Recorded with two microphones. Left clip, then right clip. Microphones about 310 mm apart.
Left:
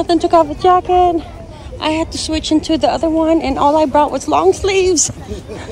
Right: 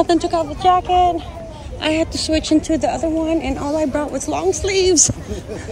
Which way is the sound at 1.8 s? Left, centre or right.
Centre.